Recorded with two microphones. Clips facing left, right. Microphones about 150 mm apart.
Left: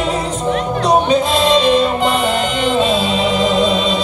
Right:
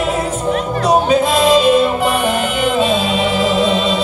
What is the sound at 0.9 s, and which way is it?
Music, 5° right (ahead or behind).